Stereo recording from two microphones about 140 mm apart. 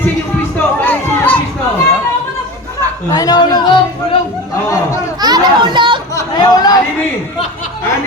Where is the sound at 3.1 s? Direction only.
30° left (ahead or behind).